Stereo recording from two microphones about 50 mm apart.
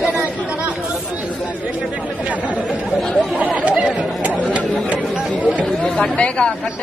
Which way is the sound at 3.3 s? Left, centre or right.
Right.